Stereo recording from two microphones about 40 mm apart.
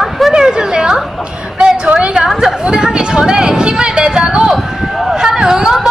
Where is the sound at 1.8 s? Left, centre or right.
Right.